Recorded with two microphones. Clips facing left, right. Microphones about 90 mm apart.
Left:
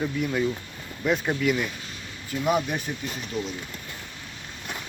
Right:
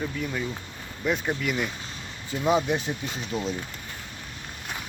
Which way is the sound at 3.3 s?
35° right (ahead or behind).